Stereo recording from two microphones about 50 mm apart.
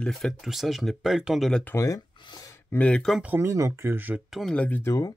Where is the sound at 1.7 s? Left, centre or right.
Left.